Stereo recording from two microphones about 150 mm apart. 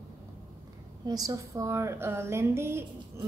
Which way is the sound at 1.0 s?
25° right (ahead or behind).